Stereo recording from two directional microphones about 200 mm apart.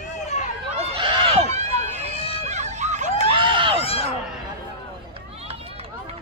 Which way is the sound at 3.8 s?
30° left (ahead or behind).